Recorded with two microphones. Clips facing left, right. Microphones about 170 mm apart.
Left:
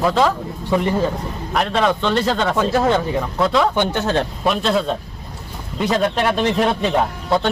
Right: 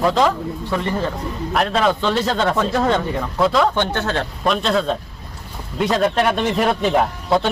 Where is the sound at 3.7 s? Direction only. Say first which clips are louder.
Left 2 dB; 15° left (ahead or behind).